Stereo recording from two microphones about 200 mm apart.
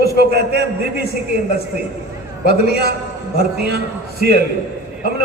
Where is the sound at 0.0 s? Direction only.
55° right (ahead or behind).